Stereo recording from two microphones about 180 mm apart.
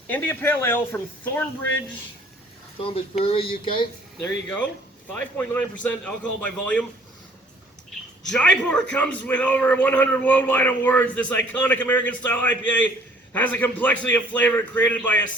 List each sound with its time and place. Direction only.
0.1 s a man's voice: 10° left (ahead or behind)
2.7 s speech: 30° left (ahead or behind)
4.2 s a man's voice: 5° left (ahead or behind)
8.3 s a man's voice: 5° left (ahead or behind)